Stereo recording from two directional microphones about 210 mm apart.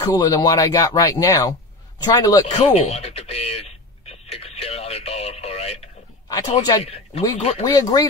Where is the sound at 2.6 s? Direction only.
30° left (ahead or behind).